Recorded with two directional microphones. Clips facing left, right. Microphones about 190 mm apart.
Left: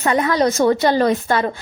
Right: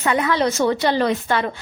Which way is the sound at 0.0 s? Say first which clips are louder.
Left 2 dB; 40° left (ahead or behind).